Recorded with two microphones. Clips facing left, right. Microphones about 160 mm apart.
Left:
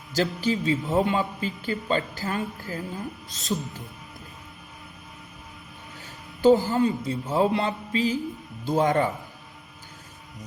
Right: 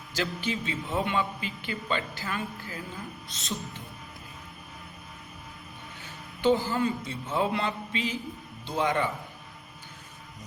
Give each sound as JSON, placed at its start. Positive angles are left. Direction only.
{"t": 0.1, "sound": "a man's voice", "side_deg": 40}
{"t": 6.4, "sound": "a man's voice", "side_deg": 35}